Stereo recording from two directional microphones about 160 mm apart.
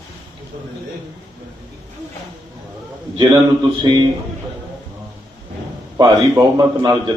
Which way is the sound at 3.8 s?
25° right (ahead or behind).